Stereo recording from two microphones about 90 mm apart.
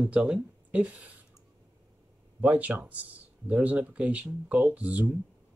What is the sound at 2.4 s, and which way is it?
Speech, 15° right (ahead or behind).